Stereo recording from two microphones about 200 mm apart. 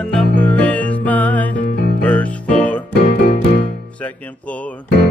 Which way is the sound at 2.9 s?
55° left (ahead or behind).